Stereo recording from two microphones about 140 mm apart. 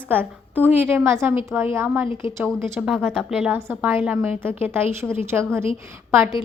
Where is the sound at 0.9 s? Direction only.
15° right (ahead or behind).